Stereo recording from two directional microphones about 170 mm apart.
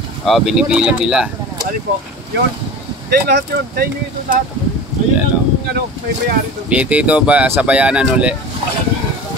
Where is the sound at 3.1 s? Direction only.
70° right (ahead or behind).